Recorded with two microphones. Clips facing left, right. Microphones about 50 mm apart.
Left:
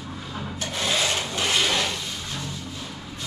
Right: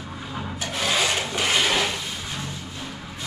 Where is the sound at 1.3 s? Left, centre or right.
Centre.